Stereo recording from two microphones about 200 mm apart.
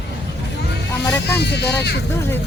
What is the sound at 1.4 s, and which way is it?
Speech, 55° left (ahead or behind).